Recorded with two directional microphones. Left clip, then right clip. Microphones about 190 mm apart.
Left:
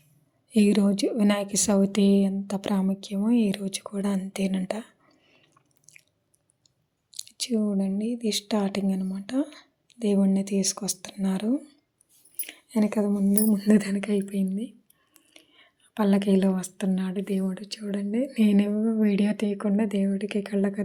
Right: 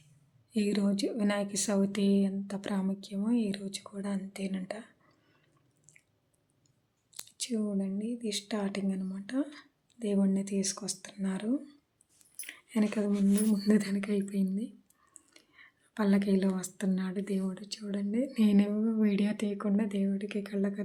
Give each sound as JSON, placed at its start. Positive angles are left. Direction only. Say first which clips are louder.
{"t": 0.5, "sound": "speech", "louder": "left 8 dB", "side_deg": 30}
{"t": 5.9, "sound": "chewing", "louder": "left 9 dB", "side_deg": 30}
{"t": 7.1, "sound": "speech", "louder": "left 8 dB", "side_deg": 25}
{"t": 12.4, "sound": "a sound", "louder": "left 5 dB", "side_deg": 15}
{"t": 13.5, "sound": "a woman's voice", "louder": "left 6 dB", "side_deg": 15}